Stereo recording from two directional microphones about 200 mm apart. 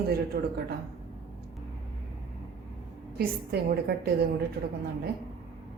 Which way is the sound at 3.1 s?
50° right (ahead or behind).